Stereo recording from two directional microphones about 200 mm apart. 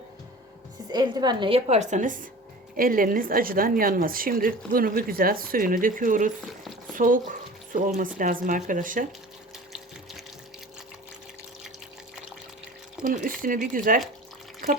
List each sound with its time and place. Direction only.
0.9 s a woman's voice: 20° right (ahead or behind); by 9.0 s 40° right (ahead or behind)
9.7 s water: centre (ahead or behind)
13.0 s a woman's voice: 40° right (ahead or behind)